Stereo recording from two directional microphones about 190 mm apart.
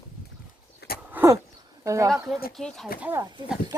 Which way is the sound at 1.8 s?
15° right (ahead or behind).